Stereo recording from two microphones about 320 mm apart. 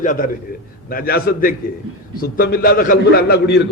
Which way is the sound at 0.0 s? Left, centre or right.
Left.